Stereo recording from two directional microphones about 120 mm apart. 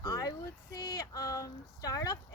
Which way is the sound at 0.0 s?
30° left (ahead or behind).